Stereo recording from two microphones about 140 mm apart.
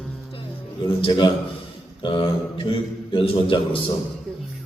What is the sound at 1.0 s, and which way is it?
A man's voice, 30° left (ahead or behind).